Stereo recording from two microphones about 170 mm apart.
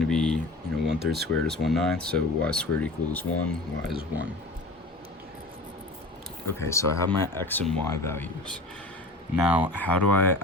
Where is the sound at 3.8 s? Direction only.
5° right (ahead or behind).